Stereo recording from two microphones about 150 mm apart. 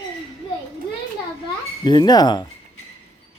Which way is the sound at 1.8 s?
30° left (ahead or behind).